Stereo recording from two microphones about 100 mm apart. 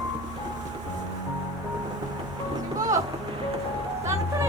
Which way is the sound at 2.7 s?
35° right (ahead or behind).